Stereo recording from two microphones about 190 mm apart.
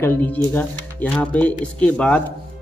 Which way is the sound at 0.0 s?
10° left (ahead or behind).